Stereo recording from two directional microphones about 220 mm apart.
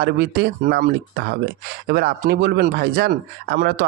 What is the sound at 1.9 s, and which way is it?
Speech, 45° right (ahead or behind).